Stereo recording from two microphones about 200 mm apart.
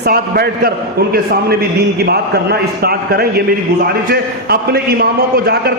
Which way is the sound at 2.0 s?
55° right (ahead or behind).